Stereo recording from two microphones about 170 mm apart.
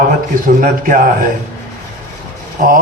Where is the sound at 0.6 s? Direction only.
55° right (ahead or behind).